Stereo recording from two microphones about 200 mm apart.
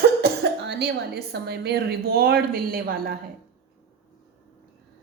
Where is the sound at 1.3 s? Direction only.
55° right (ahead or behind).